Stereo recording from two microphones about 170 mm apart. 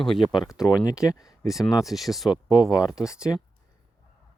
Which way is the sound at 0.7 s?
20° left (ahead or behind).